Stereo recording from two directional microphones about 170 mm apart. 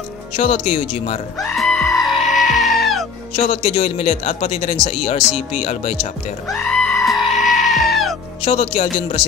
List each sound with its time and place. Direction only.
0.4 s speech: 35° left (ahead or behind)
1.4 s music: centre (ahead or behind)
3.3 s speech: 40° left (ahead or behind)
5.2 s speech: centre (ahead or behind)
5.6 s speech: 40° left (ahead or behind)
6.5 s goat: 5° left (ahead or behind)
8.5 s speech: 35° left (ahead or behind)